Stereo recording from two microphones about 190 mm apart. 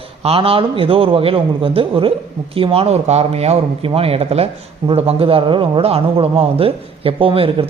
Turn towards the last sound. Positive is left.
turn(degrees=-30)  # may be behind; listen again after turning